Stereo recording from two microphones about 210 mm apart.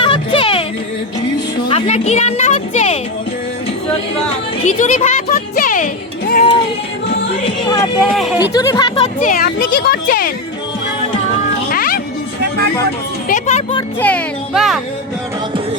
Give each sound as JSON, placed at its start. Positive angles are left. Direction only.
{"t": 0.0, "sound": "music", "side_deg": 25}
{"t": 1.6, "sound": "music", "side_deg": 30}
{"t": 4.6, "sound": "music", "side_deg": 35}
{"t": 8.1, "sound": "speech", "side_deg": 0}
{"t": 8.4, "sound": "speech", "side_deg": 15}
{"t": 9.0, "sound": "speech", "side_deg": 40}
{"t": 11.7, "sound": "music", "side_deg": 45}
{"t": 13.2, "sound": "speech", "side_deg": 35}
{"t": 14.0, "sound": "a child's voice", "side_deg": 5}